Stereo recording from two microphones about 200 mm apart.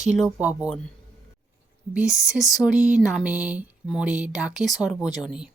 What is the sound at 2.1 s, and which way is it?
Speech, 5° right (ahead or behind).